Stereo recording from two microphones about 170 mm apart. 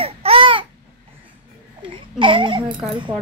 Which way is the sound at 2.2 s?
30° right (ahead or behind).